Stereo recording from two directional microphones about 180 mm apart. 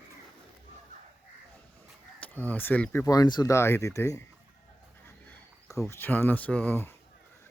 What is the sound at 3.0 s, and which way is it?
Speech, 20° left (ahead or behind).